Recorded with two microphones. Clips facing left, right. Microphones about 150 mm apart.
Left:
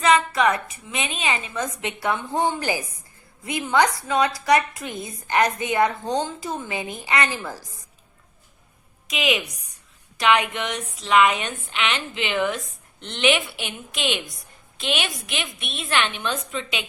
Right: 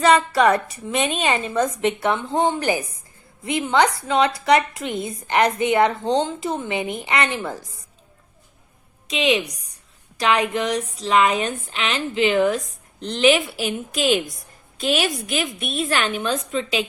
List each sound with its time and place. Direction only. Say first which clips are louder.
0.0 s a woman's voice: right 3 dB; 35° right (ahead or behind)
9.0 s a woman's voice: right 4 dB; 30° right (ahead or behind)